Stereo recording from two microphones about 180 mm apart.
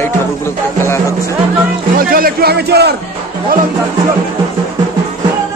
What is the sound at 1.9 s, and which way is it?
A man's voice, 55° right (ahead or behind).